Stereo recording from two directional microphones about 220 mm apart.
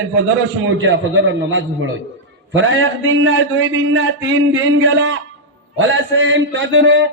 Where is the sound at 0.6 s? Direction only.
60° right (ahead or behind).